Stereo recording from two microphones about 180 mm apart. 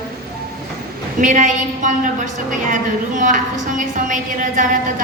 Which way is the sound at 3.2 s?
45° right (ahead or behind).